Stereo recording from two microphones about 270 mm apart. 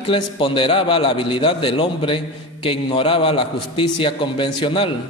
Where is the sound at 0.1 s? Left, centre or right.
Centre.